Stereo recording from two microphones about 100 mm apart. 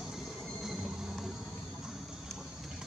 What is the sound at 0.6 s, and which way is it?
Train, 5° right (ahead or behind).